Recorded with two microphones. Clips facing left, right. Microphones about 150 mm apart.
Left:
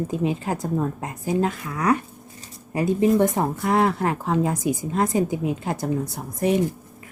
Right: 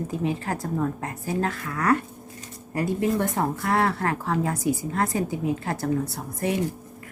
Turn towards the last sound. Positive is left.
turn(degrees=20)  # may be behind; listen again after turning